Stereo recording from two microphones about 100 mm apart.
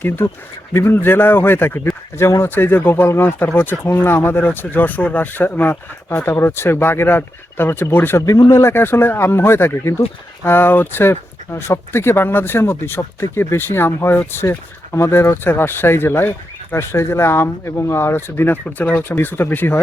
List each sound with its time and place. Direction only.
0.2 s speech: 20° left (ahead or behind)
8.2 s speech: 35° left (ahead or behind)